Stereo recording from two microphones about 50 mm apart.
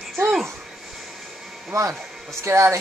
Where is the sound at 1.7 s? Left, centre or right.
Right.